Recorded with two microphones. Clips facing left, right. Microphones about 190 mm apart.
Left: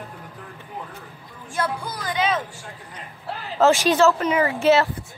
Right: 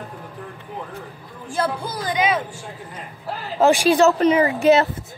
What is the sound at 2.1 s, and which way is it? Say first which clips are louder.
Speech: right 2 dB; 10° right (ahead or behind).